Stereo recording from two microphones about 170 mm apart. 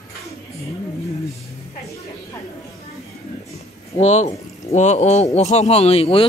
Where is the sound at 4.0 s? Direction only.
40° left (ahead or behind).